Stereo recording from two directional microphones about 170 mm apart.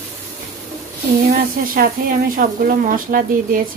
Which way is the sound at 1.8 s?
60° right (ahead or behind).